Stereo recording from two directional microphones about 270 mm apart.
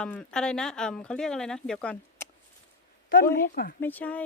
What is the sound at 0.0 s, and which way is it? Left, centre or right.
Speech, centre.